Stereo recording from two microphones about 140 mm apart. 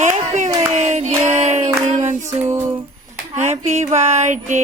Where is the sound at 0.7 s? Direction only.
50° right (ahead or behind).